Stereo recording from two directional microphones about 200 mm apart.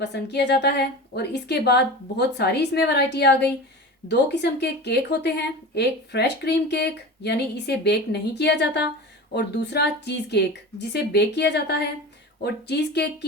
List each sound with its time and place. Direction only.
0.0 s a woman's voice: 55° left (ahead or behind)